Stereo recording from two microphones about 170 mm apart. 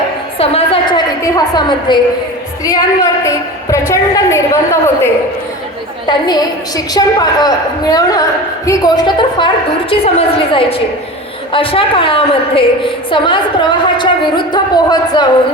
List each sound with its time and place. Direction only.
0.3 s a sound: 35° left (ahead or behind)
1.2 s a woman's voice: 25° left (ahead or behind)
6.1 s a woman's voice: 25° left (ahead or behind)